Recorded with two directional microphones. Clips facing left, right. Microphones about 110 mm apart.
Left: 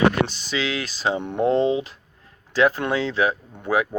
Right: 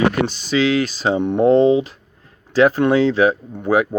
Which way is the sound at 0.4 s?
30° right (ahead or behind).